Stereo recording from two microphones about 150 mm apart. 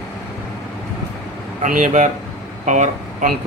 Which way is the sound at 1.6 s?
60° right (ahead or behind).